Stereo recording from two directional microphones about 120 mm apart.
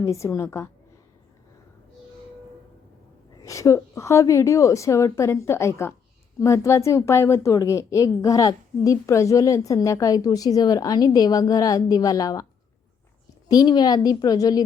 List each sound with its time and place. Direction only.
0.0 s a woman's voice: 25° left (ahead or behind)
3.3 s a woman's voice: 25° left (ahead or behind)
13.5 s a woman's voice: 35° left (ahead or behind)